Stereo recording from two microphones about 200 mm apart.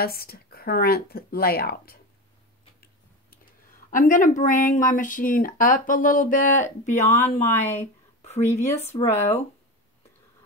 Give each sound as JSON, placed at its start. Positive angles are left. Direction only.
{"t": 0.0, "sound": "speech", "side_deg": 50}
{"t": 3.9, "sound": "speech", "side_deg": 40}
{"t": 7.4, "sound": "speech", "side_deg": 10}